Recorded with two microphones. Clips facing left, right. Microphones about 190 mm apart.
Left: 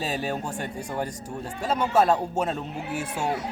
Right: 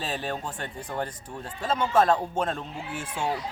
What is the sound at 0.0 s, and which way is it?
Speech, 10° left (ahead or behind).